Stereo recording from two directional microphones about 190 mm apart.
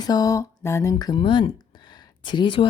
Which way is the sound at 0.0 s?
20° left (ahead or behind).